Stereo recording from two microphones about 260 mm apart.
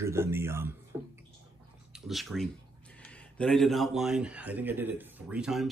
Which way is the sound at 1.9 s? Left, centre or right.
Centre.